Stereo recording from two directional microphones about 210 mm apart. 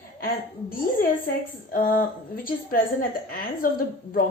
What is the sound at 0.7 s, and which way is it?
A woman's voice, 45° left (ahead or behind).